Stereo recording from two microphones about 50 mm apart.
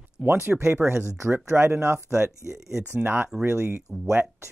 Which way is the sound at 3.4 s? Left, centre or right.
Right.